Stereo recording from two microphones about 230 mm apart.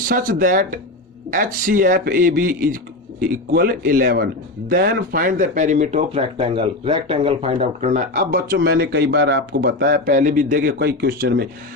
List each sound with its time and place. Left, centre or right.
0.0 s speech: right